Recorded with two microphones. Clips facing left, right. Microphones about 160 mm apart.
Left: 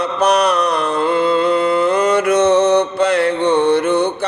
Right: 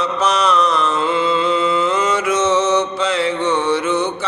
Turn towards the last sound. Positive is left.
turn(degrees=55)  # may be behind; listen again after turning